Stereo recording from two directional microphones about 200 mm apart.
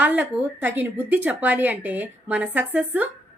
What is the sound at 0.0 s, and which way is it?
Speech, 10° right (ahead or behind).